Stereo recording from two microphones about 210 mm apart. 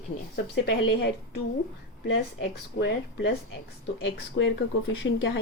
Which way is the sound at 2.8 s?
60° left (ahead or behind).